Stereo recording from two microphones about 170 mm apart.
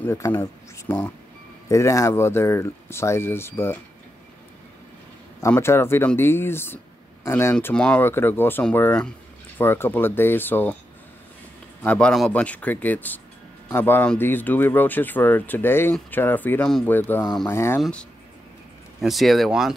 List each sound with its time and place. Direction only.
0.0 s speech: 15° left (ahead or behind)
5.5 s speech: 15° left (ahead or behind)
11.8 s speech: 5° left (ahead or behind)
17.7 s speech: 5° left (ahead or behind)